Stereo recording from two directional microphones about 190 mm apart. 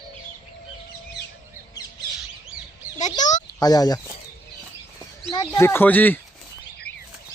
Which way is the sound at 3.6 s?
20° left (ahead or behind).